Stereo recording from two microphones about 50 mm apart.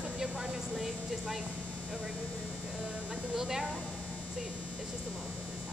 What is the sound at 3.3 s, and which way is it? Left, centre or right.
Speech, centre.